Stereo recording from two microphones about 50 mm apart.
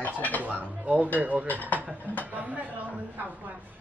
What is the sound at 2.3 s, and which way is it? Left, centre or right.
Speech, right.